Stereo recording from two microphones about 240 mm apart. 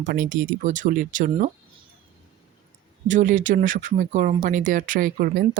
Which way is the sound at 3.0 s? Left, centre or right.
Right.